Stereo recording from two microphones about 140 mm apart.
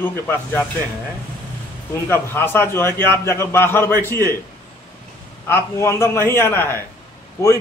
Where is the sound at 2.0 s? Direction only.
15° left (ahead or behind).